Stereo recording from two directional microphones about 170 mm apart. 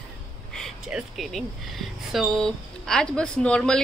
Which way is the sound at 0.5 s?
Centre (ahead or behind).